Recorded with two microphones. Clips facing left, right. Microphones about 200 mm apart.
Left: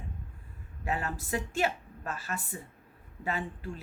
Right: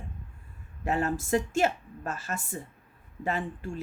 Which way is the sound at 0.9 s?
45° right (ahead or behind).